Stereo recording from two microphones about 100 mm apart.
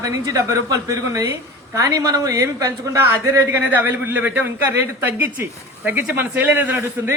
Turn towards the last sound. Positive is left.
turn(degrees=-25)  # may be behind; listen again after turning